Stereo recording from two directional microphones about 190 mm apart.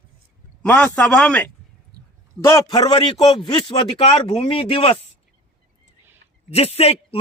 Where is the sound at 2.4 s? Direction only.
20° left (ahead or behind).